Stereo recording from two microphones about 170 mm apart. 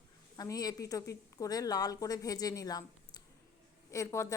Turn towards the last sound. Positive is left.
turn(degrees=15)  # may be behind; listen again after turning